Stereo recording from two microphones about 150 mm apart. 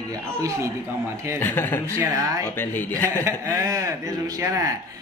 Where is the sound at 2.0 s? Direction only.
20° right (ahead or behind).